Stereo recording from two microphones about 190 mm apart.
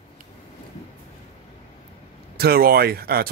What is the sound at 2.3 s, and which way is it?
Speech, 55° right (ahead or behind).